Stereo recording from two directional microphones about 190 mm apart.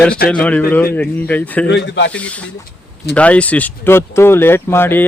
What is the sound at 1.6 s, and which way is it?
Speech, 65° left (ahead or behind).